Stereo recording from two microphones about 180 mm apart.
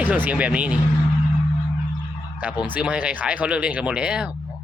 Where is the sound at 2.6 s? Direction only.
5° right (ahead or behind).